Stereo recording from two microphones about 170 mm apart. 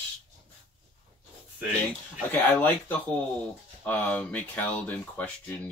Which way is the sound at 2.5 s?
10° left (ahead or behind).